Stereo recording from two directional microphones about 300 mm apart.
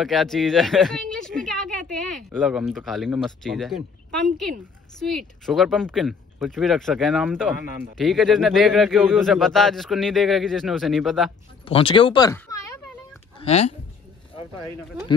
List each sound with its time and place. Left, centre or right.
0.0 s speech: centre
5.1 s speech: centre
11.6 s speech: centre